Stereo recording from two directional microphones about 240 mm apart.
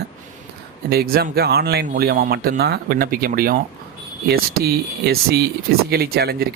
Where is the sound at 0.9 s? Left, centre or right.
Right.